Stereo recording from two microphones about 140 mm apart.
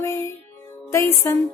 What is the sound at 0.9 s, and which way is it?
Music, 20° left (ahead or behind).